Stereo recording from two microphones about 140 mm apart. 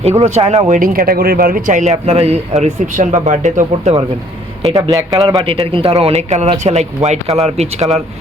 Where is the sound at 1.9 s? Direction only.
50° right (ahead or behind).